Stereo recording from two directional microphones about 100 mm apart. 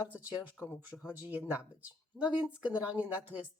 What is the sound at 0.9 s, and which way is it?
Speech, 15° left (ahead or behind).